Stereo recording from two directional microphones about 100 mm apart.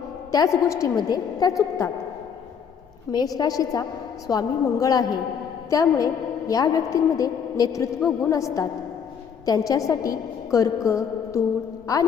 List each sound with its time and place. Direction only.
0.3 s a woman's voice: 35° left (ahead or behind)
3.1 s a woman's voice: 40° left (ahead or behind)
9.5 s a woman's voice: 35° left (ahead or behind)